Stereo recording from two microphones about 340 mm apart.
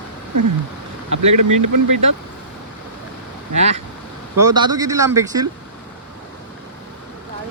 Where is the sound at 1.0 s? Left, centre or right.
Right.